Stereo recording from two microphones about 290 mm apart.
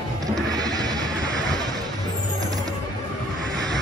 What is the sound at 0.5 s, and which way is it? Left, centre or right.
Music, centre.